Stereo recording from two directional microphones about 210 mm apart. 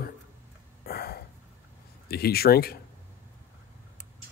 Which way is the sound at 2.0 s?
50° left (ahead or behind).